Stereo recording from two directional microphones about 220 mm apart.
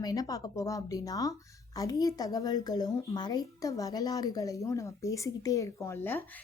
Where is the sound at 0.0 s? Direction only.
15° left (ahead or behind).